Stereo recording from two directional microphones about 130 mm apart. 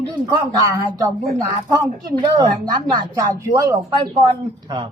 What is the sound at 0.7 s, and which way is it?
Speech, 30° right (ahead or behind).